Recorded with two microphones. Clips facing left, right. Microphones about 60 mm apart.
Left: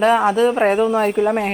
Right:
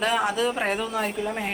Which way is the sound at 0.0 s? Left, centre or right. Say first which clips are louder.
Left 9 dB; left.